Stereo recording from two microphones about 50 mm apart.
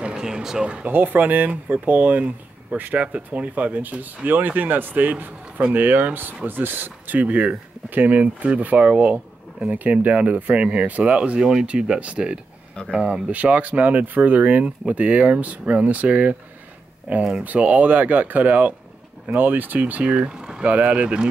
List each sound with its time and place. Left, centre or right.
0.1 s speech: centre
0.7 s speech: right
0.9 s speech: right
20.3 s a sound: centre
20.6 s speech: right